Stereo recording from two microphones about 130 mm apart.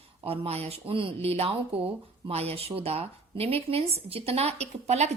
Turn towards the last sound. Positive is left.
turn(degrees=-55)  # may be behind; listen again after turning